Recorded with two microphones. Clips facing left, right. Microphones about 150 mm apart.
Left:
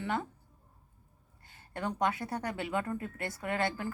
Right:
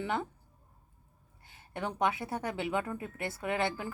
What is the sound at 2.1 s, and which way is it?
Speech, 20° right (ahead or behind).